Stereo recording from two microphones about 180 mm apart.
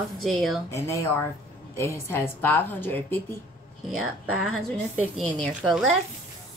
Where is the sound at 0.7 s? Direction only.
15° left (ahead or behind).